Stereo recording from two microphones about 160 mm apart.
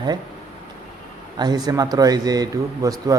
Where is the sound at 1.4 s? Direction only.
25° right (ahead or behind).